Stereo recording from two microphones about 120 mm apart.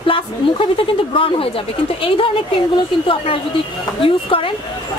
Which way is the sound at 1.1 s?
50° left (ahead or behind).